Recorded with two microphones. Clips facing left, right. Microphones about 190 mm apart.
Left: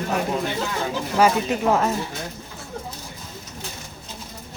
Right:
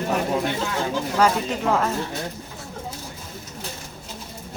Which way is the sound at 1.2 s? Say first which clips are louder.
Left 3 dB; 10° left (ahead or behind).